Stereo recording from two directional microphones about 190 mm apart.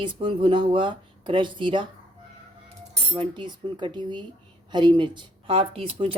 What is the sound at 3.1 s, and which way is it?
Speech, 25° right (ahead or behind).